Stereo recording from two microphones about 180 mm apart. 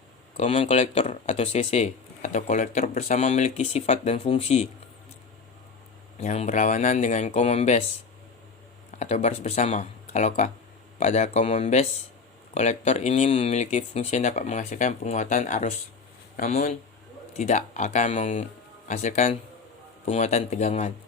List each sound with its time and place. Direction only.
0.3 s speech: 35° left (ahead or behind)
6.1 s speech: 40° left (ahead or behind)
8.9 s speech: 40° left (ahead or behind)